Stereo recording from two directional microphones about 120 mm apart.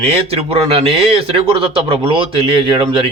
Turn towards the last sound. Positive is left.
turn(degrees=-45)  # may be behind; listen again after turning